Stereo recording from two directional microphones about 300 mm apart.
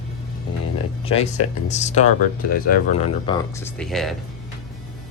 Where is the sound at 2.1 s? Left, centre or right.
Left.